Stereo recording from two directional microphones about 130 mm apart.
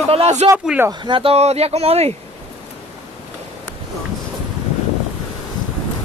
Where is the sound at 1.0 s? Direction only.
40° right (ahead or behind).